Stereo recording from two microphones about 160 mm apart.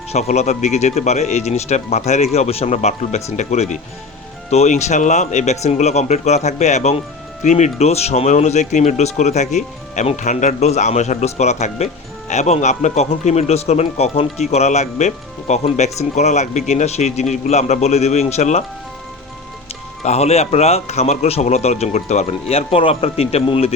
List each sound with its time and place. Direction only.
0.1 s speech: 45° left (ahead or behind)
20.0 s a man's voice: 40° left (ahead or behind)